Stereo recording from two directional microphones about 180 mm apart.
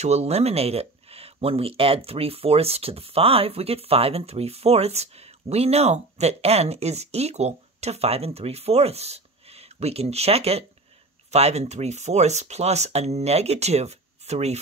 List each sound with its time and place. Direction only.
0.0 s speech: 35° right (ahead or behind)